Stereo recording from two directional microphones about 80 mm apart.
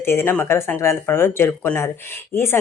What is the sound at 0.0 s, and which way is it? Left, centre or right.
Speech, left.